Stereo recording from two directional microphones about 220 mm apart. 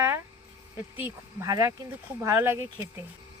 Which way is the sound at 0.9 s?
10° right (ahead or behind).